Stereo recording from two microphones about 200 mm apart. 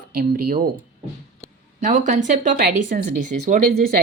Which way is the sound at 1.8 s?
40° right (ahead or behind).